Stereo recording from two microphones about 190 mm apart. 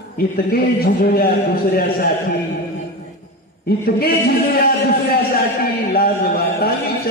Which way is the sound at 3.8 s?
55° left (ahead or behind).